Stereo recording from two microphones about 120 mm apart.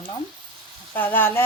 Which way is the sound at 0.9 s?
15° left (ahead or behind).